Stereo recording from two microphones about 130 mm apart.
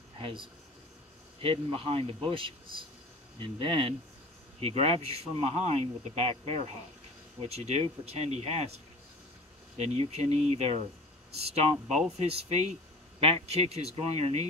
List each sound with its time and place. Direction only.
0.2 s speech: 40° right (ahead or behind)
4.6 s speech: 50° right (ahead or behind)
9.8 s speech: 55° right (ahead or behind)